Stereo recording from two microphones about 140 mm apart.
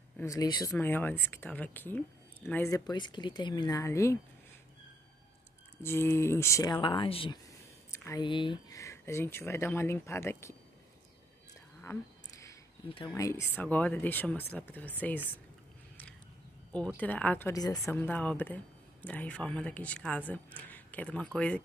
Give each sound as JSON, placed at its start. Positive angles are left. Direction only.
{"t": 0.2, "sound": "speech", "side_deg": 25}
{"t": 2.9, "sound": "speech", "side_deg": 30}
{"t": 5.8, "sound": "speech", "side_deg": 15}
{"t": 6.7, "sound": "speech", "side_deg": 35}
{"t": 7.9, "sound": "a sound", "side_deg": 15}
{"t": 8.2, "sound": "speech", "side_deg": 35}
{"t": 8.7, "sound": "speech", "side_deg": 20}
{"t": 11.8, "sound": "a sound", "side_deg": 20}
{"t": 13.1, "sound": "speech", "side_deg": 20}
{"t": 16.7, "sound": "speech", "side_deg": 10}
{"t": 17.5, "sound": "speech", "side_deg": 25}
{"t": 17.9, "sound": "speech", "side_deg": 10}